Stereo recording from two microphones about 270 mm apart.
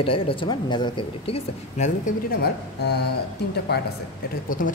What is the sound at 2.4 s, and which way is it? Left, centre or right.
Speech, left.